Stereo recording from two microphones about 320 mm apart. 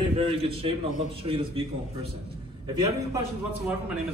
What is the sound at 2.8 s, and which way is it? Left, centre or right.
Speech, centre.